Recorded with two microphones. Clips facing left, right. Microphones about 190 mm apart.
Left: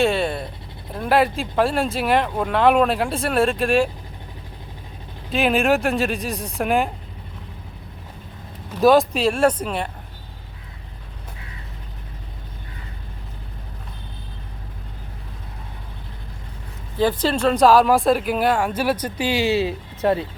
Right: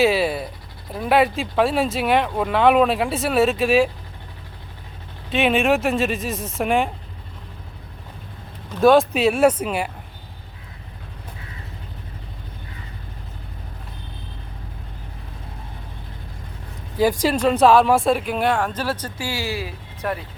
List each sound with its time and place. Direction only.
0.0 s a sound: 5° right (ahead or behind)
0.9 s speech: centre (ahead or behind)
5.3 s speech: centre (ahead or behind)
8.8 s speech: centre (ahead or behind)
17.2 s speech: 5° right (ahead or behind); by 20.2 s 25° left (ahead or behind)